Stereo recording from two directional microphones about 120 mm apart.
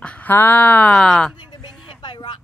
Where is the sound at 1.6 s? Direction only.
40° left (ahead or behind).